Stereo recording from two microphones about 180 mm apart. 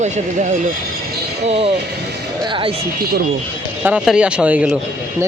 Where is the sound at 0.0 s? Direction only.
40° right (ahead or behind).